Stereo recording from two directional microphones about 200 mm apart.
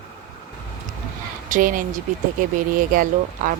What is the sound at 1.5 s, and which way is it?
Speech, 45° right (ahead or behind).